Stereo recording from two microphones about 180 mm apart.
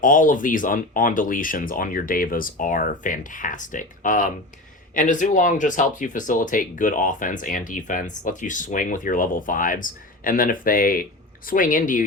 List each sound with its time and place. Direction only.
0.0 s speech: 45° left (ahead or behind)